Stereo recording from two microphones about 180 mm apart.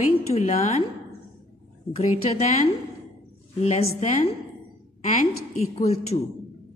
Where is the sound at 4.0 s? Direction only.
35° left (ahead or behind).